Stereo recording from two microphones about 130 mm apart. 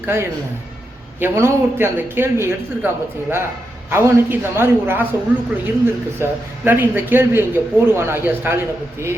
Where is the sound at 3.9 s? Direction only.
20° right (ahead or behind).